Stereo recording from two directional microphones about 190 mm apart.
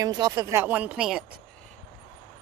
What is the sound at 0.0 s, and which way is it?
Speech, 20° right (ahead or behind).